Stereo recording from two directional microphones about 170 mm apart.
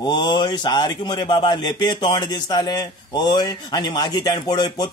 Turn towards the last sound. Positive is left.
turn(degrees=25)  # may be behind; listen again after turning